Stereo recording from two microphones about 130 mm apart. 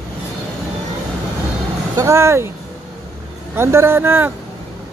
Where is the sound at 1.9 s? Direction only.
20° right (ahead or behind).